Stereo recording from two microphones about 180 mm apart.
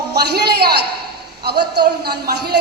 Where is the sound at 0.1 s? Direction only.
65° right (ahead or behind).